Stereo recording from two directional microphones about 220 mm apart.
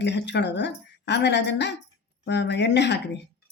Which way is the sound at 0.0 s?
50° left (ahead or behind).